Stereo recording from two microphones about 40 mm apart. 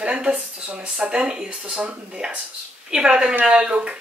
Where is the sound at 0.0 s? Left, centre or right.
Right.